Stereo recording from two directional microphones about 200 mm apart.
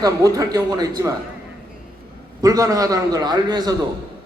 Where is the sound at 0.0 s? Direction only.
15° right (ahead or behind).